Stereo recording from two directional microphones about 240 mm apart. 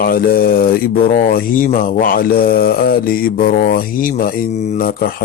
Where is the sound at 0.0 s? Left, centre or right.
Left.